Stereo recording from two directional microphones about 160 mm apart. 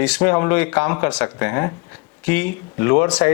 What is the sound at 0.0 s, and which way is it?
Speech, 10° left (ahead or behind).